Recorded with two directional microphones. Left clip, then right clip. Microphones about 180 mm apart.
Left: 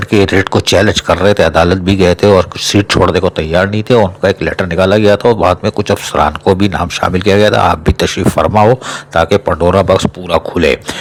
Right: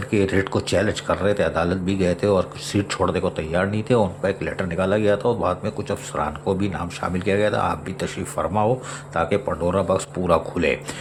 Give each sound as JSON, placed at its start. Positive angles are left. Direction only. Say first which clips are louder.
{"t": 0.1, "sound": "speech", "louder": "left 11 dB", "side_deg": 45}